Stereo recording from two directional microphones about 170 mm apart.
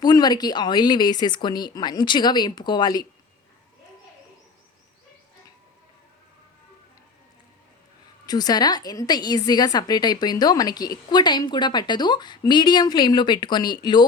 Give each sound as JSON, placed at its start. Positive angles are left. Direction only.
{"t": 0.0, "sound": "a woman's voice", "side_deg": 25}
{"t": 8.3, "sound": "a woman's voice", "side_deg": 25}